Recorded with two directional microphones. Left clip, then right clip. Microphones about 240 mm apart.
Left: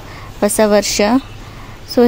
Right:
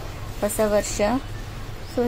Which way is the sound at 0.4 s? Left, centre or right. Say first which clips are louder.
Left 9 dB; left.